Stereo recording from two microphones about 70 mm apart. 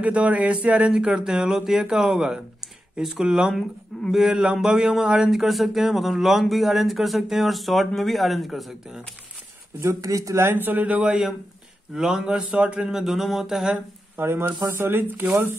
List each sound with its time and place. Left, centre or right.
0.0 s speech: centre
9.8 s speech: right
10.5 s speech: right
12.9 s speech: centre
14.1 s speech: right